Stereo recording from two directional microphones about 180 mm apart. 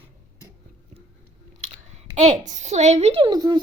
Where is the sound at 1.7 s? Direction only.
40° right (ahead or behind); by 3.6 s 20° right (ahead or behind).